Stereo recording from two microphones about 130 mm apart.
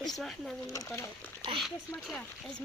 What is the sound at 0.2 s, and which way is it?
Speech, centre (ahead or behind).